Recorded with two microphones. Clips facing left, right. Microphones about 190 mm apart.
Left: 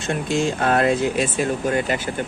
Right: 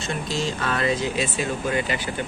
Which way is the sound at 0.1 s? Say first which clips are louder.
Left 6 dB; 50° left (ahead or behind).